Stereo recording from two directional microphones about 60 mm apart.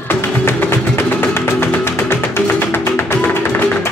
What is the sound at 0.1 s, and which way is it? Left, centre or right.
Music, left.